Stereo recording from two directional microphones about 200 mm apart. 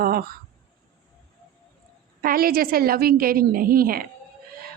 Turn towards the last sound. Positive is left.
turn(degrees=-45)  # may be behind; listen again after turning